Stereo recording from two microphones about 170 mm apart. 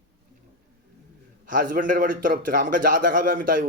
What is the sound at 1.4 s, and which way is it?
A man's voice, 50° right (ahead or behind).